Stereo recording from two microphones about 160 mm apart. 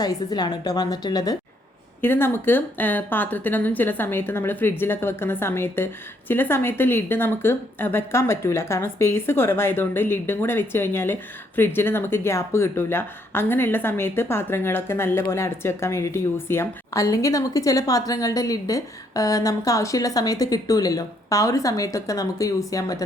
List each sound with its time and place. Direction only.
0.0 s a woman's voice: 25° left (ahead or behind)
2.0 s a woman's voice: 15° left (ahead or behind)